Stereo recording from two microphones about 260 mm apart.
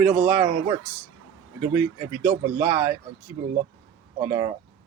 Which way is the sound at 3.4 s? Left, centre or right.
Right.